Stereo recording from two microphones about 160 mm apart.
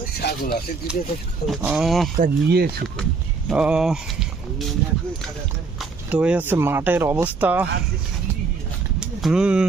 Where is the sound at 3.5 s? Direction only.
5° right (ahead or behind).